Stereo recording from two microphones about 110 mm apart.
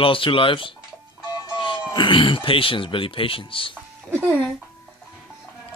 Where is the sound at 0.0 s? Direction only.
50° left (ahead or behind).